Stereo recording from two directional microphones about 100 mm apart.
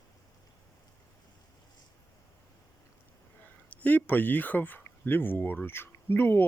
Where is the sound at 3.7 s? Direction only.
15° left (ahead or behind).